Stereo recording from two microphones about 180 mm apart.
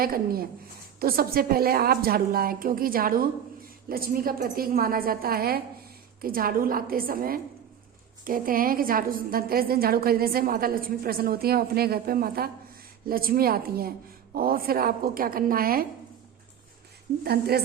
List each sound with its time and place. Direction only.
0.0 s a woman's voice: 55° right (ahead or behind)
17.2 s a woman's voice: 60° right (ahead or behind)